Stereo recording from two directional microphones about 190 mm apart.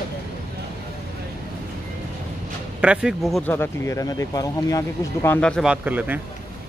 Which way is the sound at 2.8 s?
5° right (ahead or behind).